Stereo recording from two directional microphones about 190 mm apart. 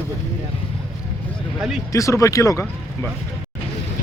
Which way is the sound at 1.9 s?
15° left (ahead or behind).